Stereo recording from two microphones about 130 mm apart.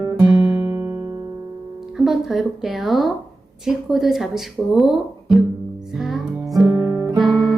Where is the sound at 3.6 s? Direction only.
Centre (ahead or behind).